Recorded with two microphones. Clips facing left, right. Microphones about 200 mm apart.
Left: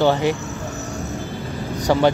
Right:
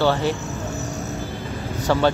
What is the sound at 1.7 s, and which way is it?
Vehicle, 15° left (ahead or behind).